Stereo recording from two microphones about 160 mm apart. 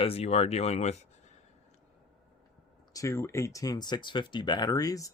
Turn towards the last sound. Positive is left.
turn(degrees=20)  # may be behind; listen again after turning